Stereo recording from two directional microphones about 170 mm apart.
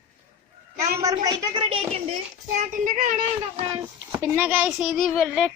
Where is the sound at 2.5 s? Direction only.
50° right (ahead or behind).